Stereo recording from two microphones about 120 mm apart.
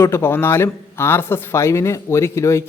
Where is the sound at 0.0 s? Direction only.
20° left (ahead or behind).